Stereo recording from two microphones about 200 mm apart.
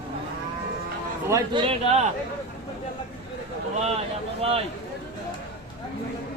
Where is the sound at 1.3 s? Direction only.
20° right (ahead or behind).